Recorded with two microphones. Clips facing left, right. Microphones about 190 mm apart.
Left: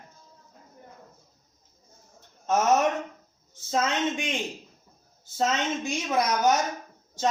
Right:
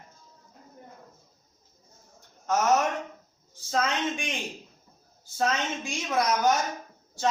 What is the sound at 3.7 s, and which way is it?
Speech, 20° left (ahead or behind).